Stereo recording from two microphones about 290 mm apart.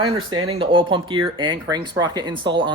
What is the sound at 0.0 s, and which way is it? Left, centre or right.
Speech, centre.